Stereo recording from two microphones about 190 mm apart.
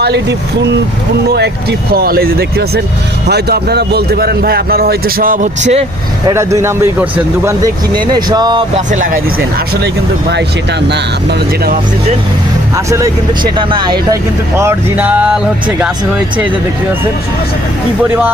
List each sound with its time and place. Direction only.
0.0 s speech: 65° right (ahead or behind)
1.9 s speech: 55° right (ahead or behind); by 5.8 s 40° right (ahead or behind)
6.2 s speech: 15° right (ahead or behind)
8.9 s speech: 40° right (ahead or behind)
9.8 s speech: 60° right (ahead or behind)
12.7 s speech: 15° right (ahead or behind)
14.6 s speech: 10° right (ahead or behind)